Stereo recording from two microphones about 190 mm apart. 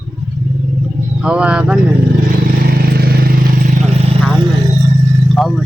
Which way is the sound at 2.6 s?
55° right (ahead or behind).